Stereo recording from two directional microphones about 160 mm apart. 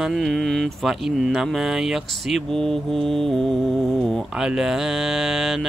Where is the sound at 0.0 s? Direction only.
Centre (ahead or behind).